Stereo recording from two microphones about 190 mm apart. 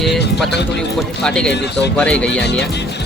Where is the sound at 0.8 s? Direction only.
5° left (ahead or behind).